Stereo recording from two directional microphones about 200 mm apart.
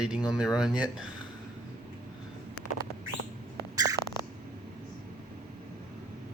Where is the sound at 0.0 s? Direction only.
5° right (ahead or behind).